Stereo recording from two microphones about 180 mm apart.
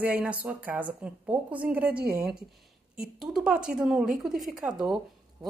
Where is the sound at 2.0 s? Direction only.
60° right (ahead or behind).